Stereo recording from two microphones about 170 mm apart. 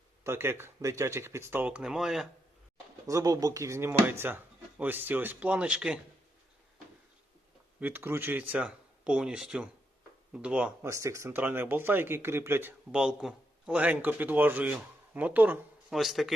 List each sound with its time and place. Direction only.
0.3 s speech: 15° right (ahead or behind)
3.1 s speech: 20° right (ahead or behind)
7.8 s speech: 10° right (ahead or behind)
10.9 s speech: 15° right (ahead or behind); by 16.3 s centre (ahead or behind)